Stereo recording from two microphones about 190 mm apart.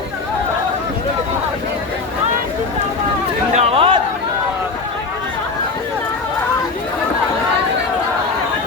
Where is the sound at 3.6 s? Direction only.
30° right (ahead or behind).